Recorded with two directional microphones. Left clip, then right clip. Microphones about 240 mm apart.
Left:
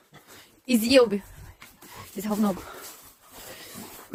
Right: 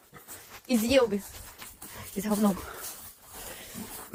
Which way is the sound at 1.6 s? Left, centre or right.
Right.